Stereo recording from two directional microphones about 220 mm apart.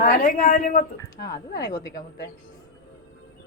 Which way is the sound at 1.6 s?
20° left (ahead or behind).